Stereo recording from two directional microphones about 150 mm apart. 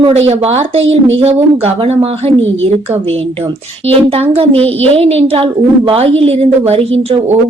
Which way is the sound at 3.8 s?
40° right (ahead or behind).